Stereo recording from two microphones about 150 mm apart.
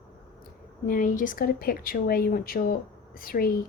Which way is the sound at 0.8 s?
65° left (ahead or behind).